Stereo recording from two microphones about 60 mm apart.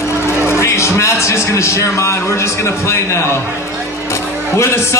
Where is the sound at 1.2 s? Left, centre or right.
Left.